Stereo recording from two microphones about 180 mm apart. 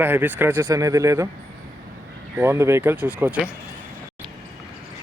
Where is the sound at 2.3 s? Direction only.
15° right (ahead or behind).